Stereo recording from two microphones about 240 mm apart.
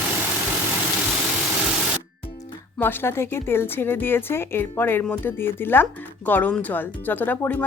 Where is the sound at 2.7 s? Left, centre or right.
Centre.